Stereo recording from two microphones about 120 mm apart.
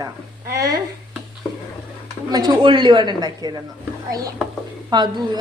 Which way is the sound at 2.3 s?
35° right (ahead or behind).